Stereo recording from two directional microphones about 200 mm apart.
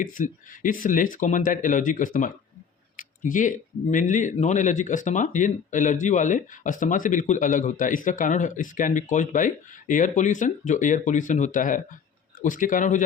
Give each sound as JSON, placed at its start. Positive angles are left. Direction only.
{"t": 0.0, "sound": "speech", "side_deg": 40}
{"t": 3.0, "sound": "a sound", "side_deg": 40}
{"t": 3.9, "sound": "speech", "side_deg": 40}